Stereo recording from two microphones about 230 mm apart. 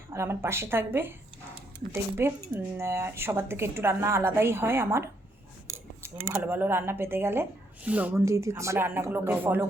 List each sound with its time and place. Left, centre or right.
0.1 s speech: centre